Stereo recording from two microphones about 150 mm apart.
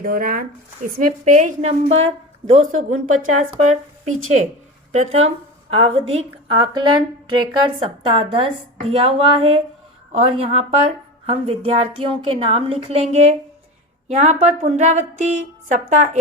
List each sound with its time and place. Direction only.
0.0 s a woman's voice: 70° right (ahead or behind)
4.9 s a woman's voice: 45° right (ahead or behind)